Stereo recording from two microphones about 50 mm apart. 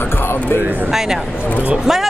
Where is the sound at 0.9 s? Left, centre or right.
Centre.